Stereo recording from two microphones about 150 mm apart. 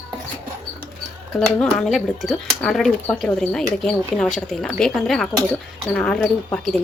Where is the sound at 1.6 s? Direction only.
Centre (ahead or behind).